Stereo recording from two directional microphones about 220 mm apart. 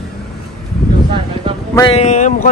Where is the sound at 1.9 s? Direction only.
30° left (ahead or behind).